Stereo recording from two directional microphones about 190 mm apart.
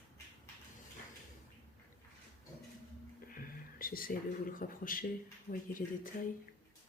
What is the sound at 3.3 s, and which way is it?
Speech, 50° left (ahead or behind).